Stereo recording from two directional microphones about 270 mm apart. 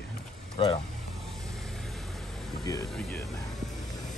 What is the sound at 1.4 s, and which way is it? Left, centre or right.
Vehicle, centre.